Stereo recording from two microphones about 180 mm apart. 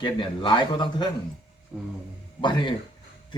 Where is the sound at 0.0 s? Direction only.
25° left (ahead or behind).